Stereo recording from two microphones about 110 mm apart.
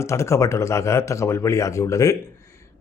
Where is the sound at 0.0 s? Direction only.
25° left (ahead or behind).